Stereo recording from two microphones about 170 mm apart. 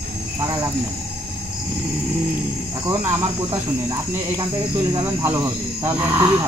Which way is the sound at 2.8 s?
15° right (ahead or behind).